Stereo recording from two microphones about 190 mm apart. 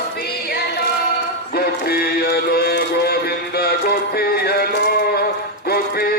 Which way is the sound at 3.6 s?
55° left (ahead or behind).